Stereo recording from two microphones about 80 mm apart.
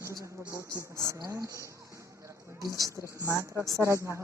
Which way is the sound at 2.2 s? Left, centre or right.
Right.